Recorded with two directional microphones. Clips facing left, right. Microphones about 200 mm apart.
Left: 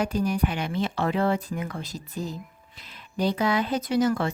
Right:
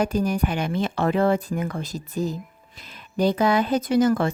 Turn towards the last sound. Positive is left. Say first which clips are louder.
# right 4 dB
turn(degrees=-50)  # may be behind; listen again after turning